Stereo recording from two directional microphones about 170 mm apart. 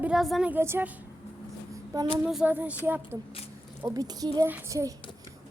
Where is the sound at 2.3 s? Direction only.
5° right (ahead or behind).